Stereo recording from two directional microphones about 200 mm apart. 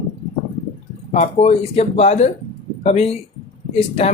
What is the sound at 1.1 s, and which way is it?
Speech, 35° left (ahead or behind).